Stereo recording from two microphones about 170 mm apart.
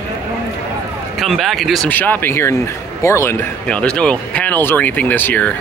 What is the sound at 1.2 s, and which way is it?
Speech, centre (ahead or behind).